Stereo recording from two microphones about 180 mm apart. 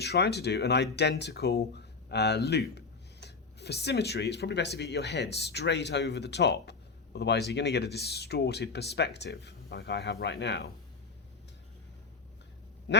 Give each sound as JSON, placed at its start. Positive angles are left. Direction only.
{"t": 0.0, "sound": "speech", "side_deg": 65}